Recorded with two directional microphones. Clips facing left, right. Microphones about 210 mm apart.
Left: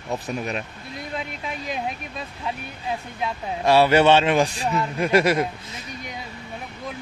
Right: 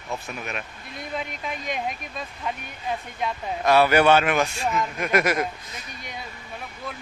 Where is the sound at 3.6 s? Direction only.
25° left (ahead or behind).